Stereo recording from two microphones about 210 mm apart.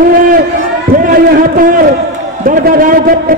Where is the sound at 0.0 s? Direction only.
45° right (ahead or behind).